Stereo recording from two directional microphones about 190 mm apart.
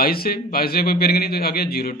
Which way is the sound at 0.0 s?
50° left (ahead or behind).